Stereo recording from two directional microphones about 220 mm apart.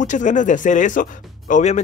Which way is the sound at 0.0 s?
35° left (ahead or behind).